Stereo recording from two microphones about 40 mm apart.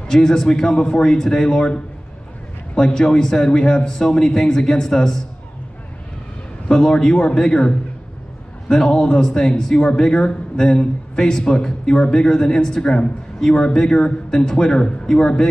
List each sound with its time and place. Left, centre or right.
0.1 s a man's voice: centre
6.7 s a man's voice: centre